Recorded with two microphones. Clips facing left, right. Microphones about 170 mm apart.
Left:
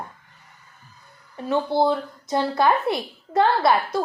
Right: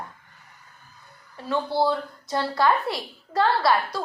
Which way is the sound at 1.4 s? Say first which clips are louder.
Left 3 dB; 20° left (ahead or behind).